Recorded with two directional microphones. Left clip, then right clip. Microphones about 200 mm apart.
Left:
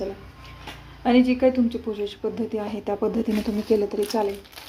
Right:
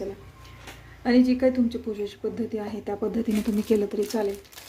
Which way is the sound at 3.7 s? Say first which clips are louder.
Left 3 dB; 25° right (ahead or behind).